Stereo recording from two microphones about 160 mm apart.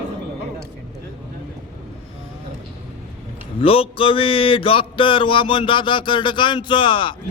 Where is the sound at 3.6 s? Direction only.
35° left (ahead or behind).